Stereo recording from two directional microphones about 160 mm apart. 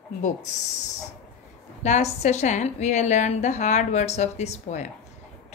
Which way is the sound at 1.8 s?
45° left (ahead or behind).